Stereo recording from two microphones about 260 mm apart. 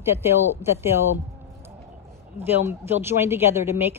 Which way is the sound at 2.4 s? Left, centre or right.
Centre.